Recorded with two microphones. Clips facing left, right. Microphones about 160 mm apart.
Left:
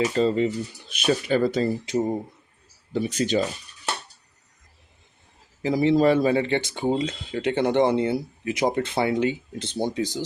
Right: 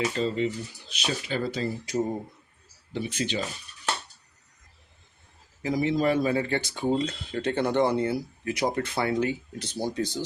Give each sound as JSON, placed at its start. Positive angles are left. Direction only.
{"t": 0.2, "sound": "speech", "side_deg": 40}
{"t": 1.8, "sound": "speech", "side_deg": 20}
{"t": 2.9, "sound": "speech", "side_deg": 40}
{"t": 5.6, "sound": "speech", "side_deg": 30}